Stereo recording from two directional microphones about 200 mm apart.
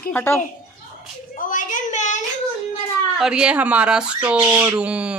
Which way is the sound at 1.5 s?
40° left (ahead or behind).